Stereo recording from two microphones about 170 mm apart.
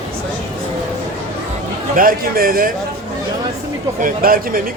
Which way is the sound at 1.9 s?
60° right (ahead or behind).